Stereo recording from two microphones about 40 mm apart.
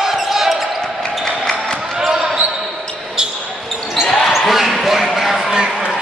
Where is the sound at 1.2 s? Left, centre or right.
Centre.